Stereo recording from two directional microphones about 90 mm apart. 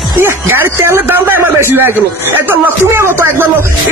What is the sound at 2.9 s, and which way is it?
Speech, 25° right (ahead or behind).